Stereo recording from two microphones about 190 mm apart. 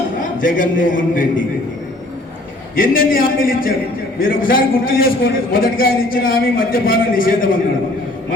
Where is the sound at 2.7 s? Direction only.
50° left (ahead or behind).